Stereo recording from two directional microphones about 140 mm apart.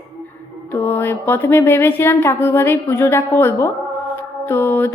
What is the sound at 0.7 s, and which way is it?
A woman's voice, 15° left (ahead or behind).